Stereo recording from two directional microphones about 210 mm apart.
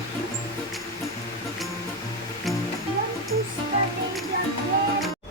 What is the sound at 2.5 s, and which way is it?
Music, centre (ahead or behind).